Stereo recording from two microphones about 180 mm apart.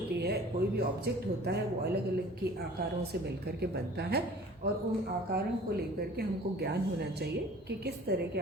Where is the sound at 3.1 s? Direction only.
65° right (ahead or behind).